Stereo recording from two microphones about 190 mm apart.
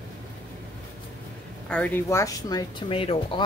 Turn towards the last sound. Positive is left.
turn(degrees=30)  # may be behind; listen again after turning